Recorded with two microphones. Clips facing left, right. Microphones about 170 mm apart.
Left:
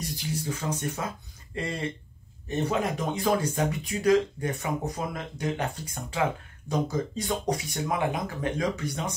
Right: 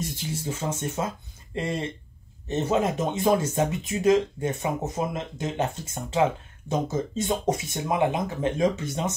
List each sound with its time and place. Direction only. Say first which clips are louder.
0.0 s speech: right 1 dB; 25° right (ahead or behind)